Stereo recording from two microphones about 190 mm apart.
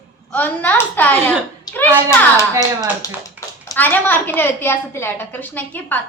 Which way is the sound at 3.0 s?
20° left (ahead or behind).